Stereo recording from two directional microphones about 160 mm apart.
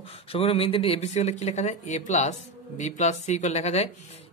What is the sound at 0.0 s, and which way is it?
Speech, 35° left (ahead or behind).